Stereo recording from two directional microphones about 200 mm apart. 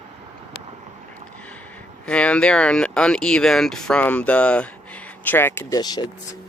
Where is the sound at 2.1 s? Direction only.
5° left (ahead or behind).